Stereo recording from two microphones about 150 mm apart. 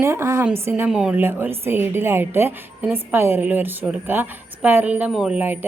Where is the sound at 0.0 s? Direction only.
15° right (ahead or behind).